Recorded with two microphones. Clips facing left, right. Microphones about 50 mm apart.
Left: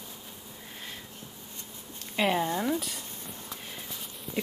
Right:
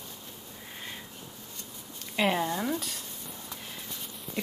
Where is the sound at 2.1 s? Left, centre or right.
Centre.